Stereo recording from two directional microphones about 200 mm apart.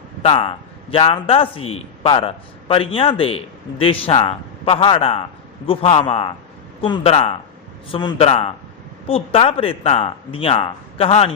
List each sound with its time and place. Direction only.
0.2 s a man's voice: 30° left (ahead or behind)